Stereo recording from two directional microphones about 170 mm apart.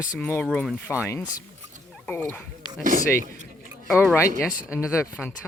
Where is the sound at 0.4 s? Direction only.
5° left (ahead or behind).